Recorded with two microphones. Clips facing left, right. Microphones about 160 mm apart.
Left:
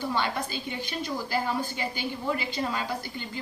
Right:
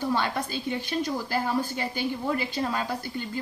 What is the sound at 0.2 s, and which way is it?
A woman's voice, 40° right (ahead or behind).